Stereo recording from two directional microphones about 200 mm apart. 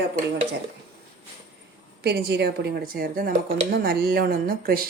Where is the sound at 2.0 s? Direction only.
55° right (ahead or behind).